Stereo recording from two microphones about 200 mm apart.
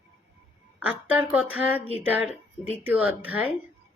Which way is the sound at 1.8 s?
30° left (ahead or behind).